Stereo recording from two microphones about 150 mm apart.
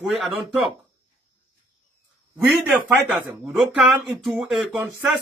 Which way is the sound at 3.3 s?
Centre (ahead or behind).